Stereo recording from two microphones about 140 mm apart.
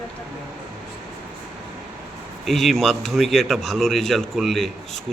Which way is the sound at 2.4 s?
Centre (ahead or behind).